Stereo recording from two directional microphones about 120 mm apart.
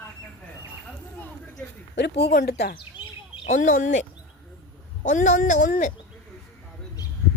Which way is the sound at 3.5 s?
90° left.